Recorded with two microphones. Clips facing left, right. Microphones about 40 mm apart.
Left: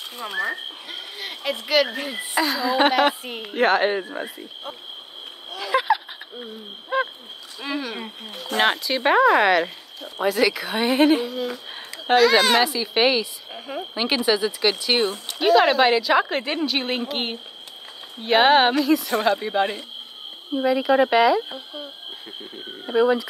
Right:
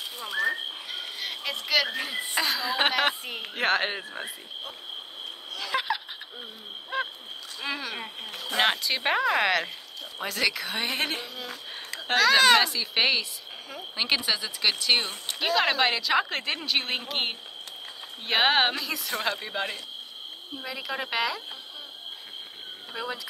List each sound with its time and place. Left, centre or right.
0.2 s speech: left
0.9 s speech: centre
4.0 s speech: centre
5.6 s a sound: centre
6.4 s hoot: centre
7.6 s speech: centre
11.4 s speech: centre
12.6 s speech: centre
22.9 s speech: centre